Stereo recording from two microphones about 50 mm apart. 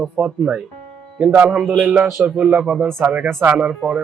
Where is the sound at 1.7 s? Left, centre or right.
Right.